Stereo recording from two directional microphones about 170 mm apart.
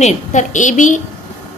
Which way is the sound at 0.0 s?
45° left (ahead or behind).